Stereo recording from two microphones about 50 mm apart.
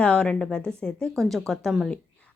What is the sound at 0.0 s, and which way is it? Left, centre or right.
A woman's voice, centre.